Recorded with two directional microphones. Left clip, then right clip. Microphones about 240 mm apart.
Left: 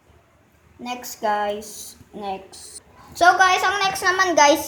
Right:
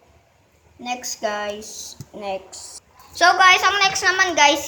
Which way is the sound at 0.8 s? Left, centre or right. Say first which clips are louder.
Left 1 dB; centre.